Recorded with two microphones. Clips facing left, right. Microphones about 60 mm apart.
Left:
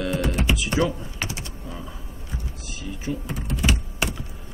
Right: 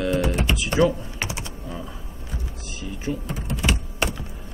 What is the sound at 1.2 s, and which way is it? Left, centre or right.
Typing, right.